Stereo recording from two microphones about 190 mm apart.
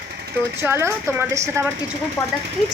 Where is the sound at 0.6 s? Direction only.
15° right (ahead or behind).